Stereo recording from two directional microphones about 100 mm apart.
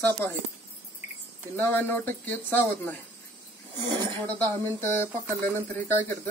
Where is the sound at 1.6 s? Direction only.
20° left (ahead or behind).